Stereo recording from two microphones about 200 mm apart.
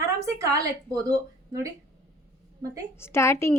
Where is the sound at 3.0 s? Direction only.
15° left (ahead or behind).